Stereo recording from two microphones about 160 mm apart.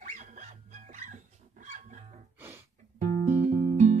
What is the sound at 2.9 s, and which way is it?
Music, 50° right (ahead or behind).